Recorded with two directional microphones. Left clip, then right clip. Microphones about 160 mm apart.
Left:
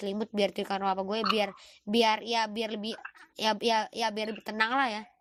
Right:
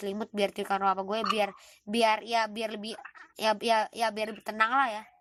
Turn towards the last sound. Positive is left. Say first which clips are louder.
# right 2 dB
turn(degrees=35)  # may be behind; listen again after turning